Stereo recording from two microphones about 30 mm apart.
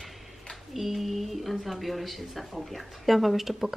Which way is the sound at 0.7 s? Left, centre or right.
Centre.